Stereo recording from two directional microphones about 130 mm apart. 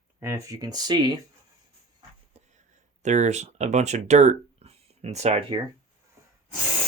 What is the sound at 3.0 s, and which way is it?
Speech, 60° right (ahead or behind).